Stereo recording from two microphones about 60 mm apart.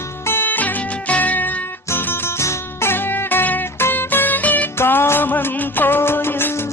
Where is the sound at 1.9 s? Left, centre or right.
Left.